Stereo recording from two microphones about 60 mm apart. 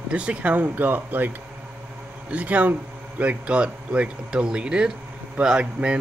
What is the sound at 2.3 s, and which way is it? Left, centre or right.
A man's voice, right.